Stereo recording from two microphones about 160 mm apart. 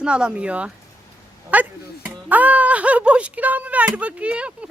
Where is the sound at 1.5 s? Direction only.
10° right (ahead or behind).